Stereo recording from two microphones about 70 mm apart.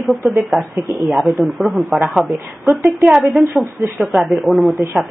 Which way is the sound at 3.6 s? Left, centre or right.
Right.